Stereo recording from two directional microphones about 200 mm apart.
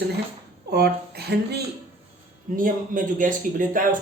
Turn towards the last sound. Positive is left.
turn(degrees=-40)  # may be behind; listen again after turning